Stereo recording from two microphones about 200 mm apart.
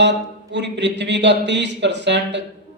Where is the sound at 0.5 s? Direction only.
60° right (ahead or behind).